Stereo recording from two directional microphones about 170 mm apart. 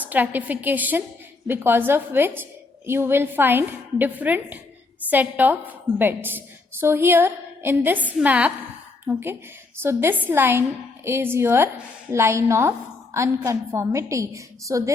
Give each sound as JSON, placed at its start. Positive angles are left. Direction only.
{"t": 0.0, "sound": "a woman's voice", "side_deg": -10}